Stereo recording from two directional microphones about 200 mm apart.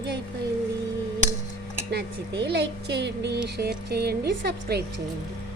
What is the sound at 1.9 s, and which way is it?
Speech, 55° right (ahead or behind).